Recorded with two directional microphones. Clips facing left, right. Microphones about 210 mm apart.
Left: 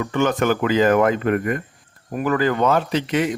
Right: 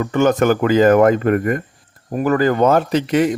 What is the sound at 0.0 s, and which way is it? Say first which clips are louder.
Speech: right 5 dB; 45° right (ahead or behind).